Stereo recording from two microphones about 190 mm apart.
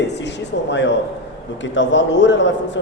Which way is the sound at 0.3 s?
70° left (ahead or behind).